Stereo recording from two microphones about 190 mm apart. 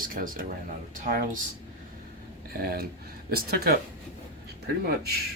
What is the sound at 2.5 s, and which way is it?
Speech, 55° right (ahead or behind).